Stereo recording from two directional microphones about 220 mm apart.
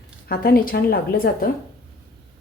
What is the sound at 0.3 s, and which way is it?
A woman's voice, 40° left (ahead or behind).